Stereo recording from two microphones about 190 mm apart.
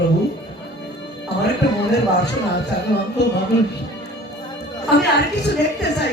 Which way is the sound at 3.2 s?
60° left (ahead or behind).